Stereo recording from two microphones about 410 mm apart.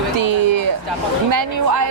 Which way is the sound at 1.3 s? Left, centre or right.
Right.